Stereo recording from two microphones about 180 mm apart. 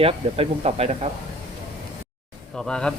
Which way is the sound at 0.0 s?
35° right (ahead or behind).